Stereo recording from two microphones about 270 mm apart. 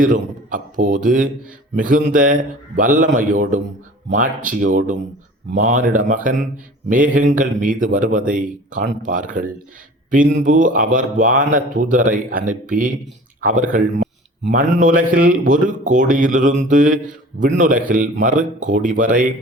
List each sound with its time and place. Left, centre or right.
0.0 s a man's voice: right